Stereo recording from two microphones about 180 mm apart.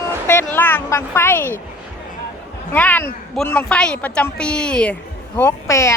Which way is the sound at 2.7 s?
10° left (ahead or behind).